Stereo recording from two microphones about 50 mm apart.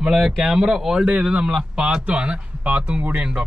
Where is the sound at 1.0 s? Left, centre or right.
Right.